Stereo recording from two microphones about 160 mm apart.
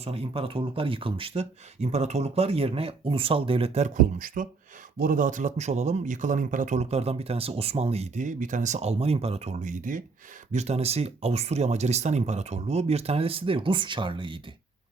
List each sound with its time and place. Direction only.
0.0 s speech: 40° right (ahead or behind); by 10.0 s 55° right (ahead or behind)
10.5 s speech: 45° right (ahead or behind)